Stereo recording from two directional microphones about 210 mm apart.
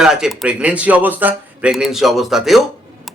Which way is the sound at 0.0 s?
Centre (ahead or behind).